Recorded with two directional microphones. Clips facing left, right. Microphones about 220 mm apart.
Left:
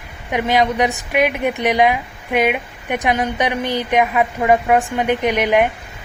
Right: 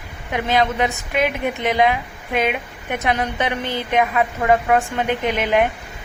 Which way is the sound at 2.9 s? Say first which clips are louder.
Left 3 dB; 15° left (ahead or behind).